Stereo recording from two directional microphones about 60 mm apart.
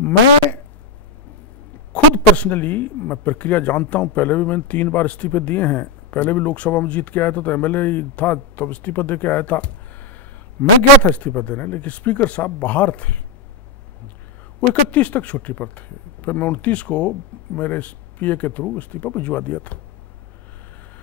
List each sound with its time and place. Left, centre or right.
1.9 s a man's voice: left
14.7 s a man's voice: left